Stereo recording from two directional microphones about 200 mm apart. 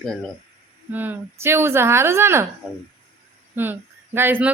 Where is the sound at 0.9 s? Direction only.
10° right (ahead or behind).